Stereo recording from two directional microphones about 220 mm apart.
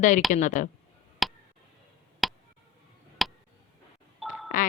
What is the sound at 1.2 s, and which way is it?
Tick, centre (ahead or behind).